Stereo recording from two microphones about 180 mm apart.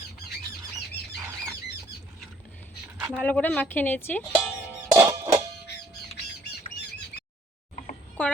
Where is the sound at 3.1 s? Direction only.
10° left (ahead or behind).